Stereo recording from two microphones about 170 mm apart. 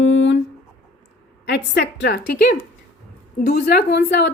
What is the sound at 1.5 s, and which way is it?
A woman's voice, 90° left.